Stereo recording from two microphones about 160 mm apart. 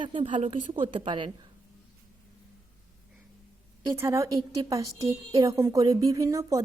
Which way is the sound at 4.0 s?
20° right (ahead or behind).